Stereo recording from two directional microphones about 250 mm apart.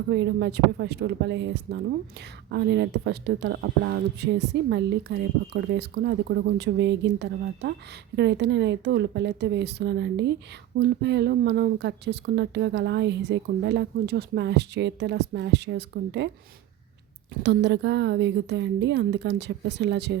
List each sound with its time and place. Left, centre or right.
0.1 s speech: right
17.4 s speech: right